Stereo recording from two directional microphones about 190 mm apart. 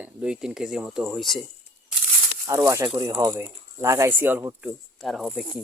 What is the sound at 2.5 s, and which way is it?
Speech, 15° right (ahead or behind).